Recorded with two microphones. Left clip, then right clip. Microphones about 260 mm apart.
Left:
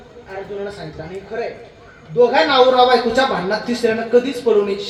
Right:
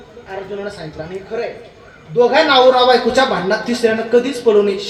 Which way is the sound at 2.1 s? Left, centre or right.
Right.